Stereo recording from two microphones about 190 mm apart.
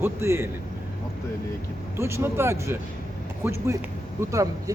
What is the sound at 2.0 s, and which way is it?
Speech, 15° right (ahead or behind).